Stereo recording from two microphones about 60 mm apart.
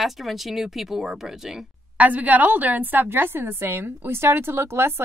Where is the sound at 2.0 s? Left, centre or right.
Right.